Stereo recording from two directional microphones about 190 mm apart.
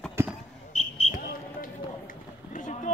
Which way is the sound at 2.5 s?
45° left (ahead or behind).